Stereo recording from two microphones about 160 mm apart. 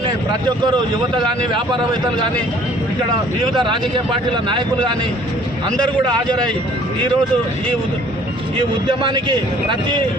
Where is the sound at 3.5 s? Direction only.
30° right (ahead or behind).